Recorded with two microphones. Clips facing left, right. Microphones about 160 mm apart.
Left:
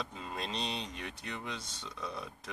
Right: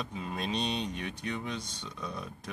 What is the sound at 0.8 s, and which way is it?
Speech, 65° right (ahead or behind).